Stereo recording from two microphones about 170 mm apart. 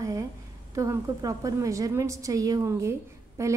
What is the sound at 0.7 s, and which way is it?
A woman's voice, 20° right (ahead or behind).